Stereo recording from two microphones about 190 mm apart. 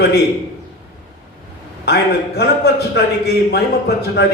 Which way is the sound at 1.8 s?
60° left (ahead or behind).